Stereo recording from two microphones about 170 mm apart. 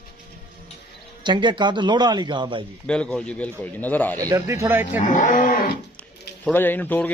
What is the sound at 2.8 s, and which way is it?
A man's voice, 5° left (ahead or behind).